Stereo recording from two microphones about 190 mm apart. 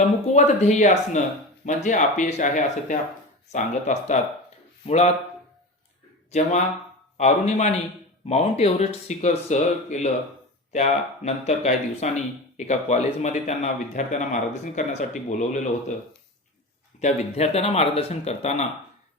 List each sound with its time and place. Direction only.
0.3 s speech: 35° left (ahead or behind)
6.3 s speech: 35° left (ahead or behind)
17.0 s speech: 35° left (ahead or behind)